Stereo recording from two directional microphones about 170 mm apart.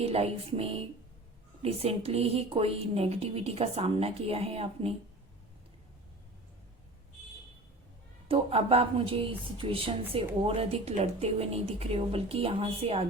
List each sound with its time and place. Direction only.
0.0 s speech: 35° right (ahead or behind)
8.3 s speech: 35° right (ahead or behind)